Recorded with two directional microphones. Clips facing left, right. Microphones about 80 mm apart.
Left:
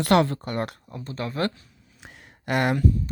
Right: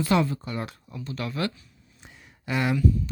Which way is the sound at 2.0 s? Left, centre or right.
Left.